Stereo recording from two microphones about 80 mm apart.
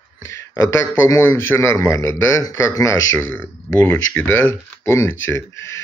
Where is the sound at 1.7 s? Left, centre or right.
Left.